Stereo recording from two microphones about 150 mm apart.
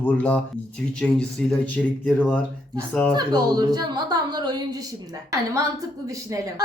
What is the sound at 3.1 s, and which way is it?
A woman's voice, 25° right (ahead or behind).